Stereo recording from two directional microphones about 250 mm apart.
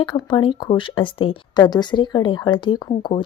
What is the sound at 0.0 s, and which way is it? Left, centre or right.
Speech, centre.